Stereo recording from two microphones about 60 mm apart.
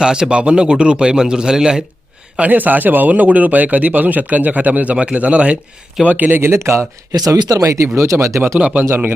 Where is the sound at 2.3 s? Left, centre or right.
Right.